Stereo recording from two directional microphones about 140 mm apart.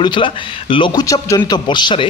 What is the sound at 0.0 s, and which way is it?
Speech, 35° left (ahead or behind).